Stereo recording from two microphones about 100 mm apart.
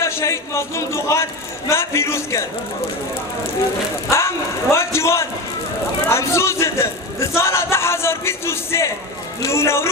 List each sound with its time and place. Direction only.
0.0 s a man's voice: 30° left (ahead or behind)
4.1 s a man's voice: 25° left (ahead or behind)